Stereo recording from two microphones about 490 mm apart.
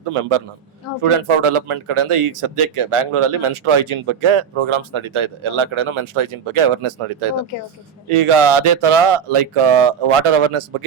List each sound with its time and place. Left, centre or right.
0.1 s a man's voice: right